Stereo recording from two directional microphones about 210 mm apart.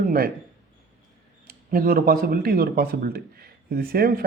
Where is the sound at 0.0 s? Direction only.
40° right (ahead or behind).